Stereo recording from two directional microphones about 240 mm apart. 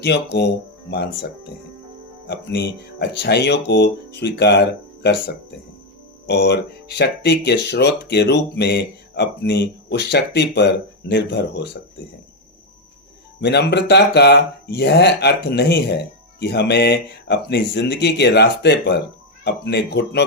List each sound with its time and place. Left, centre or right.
0.0 s speech: left
6.2 s speech: left
13.4 s speech: left